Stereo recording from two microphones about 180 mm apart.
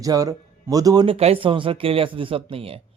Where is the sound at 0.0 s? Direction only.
20° right (ahead or behind).